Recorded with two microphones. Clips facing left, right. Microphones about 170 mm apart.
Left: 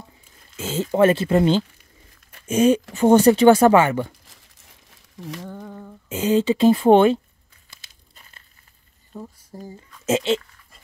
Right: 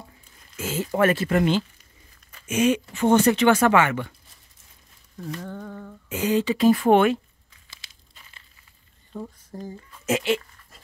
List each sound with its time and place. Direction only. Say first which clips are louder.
0.6 s speech: left 4 dB; 25° left (ahead or behind)
5.4 s humming: even; 10° left (ahead or behind)
6.0 s speech: left 4 dB; 25° left (ahead or behind)
8.1 s crumpling: left 2 dB; 40° left (ahead or behind)
9.1 s speech: right 2 dB; 5° left (ahead or behind)
10.0 s speech: left 3 dB; 25° left (ahead or behind)